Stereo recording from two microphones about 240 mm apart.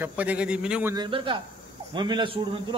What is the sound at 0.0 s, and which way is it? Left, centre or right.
Speech, centre.